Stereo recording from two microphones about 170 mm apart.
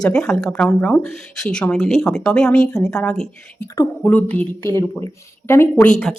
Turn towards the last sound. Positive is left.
turn(degrees=5)  # may be behind; listen again after turning